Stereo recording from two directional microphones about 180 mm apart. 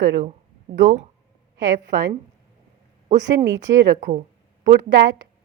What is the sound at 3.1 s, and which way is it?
Speech, 20° right (ahead or behind).